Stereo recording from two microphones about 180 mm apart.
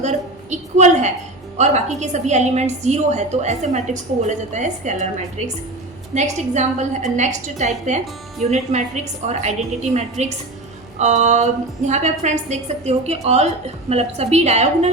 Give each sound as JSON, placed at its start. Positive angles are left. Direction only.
{"t": 0.0, "sound": "a woman's voice", "side_deg": -40}